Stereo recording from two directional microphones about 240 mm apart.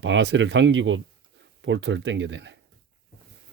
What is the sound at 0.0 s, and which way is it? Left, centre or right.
Speech, right.